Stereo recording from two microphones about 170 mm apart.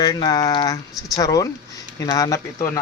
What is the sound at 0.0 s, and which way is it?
Speech, 25° left (ahead or behind).